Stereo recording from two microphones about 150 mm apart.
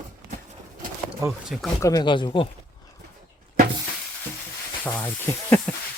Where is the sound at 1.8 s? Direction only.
25° left (ahead or behind).